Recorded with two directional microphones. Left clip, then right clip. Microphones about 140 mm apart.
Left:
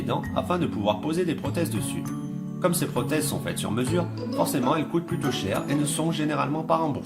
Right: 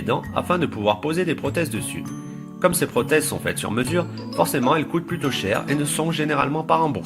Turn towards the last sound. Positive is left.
turn(degrees=-40)  # may be behind; listen again after turning